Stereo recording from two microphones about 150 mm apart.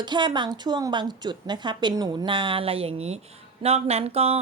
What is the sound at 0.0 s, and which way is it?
A woman's voice, 30° right (ahead or behind).